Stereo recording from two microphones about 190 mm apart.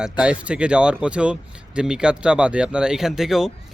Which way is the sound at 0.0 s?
5° right (ahead or behind).